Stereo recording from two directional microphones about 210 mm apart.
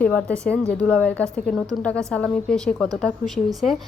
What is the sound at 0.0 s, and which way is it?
A woman's voice, 5° left (ahead or behind).